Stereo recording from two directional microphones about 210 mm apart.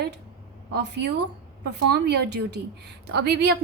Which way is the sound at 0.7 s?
50° right (ahead or behind).